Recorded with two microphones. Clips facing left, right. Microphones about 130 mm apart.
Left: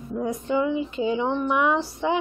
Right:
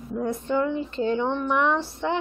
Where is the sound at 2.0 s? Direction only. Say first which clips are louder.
Left 3 dB; 5° left (ahead or behind).